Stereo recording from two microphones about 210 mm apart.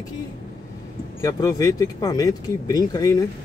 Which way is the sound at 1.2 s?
15° left (ahead or behind).